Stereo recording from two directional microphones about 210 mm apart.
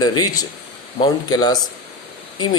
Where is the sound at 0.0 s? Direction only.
20° left (ahead or behind).